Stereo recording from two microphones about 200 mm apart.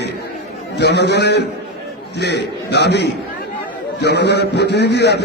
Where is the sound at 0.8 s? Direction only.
55° left (ahead or behind).